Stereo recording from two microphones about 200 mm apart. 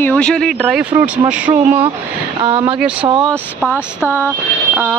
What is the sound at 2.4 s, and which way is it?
Speech, 20° right (ahead or behind).